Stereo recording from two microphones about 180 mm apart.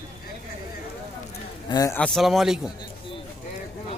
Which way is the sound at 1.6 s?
20° left (ahead or behind).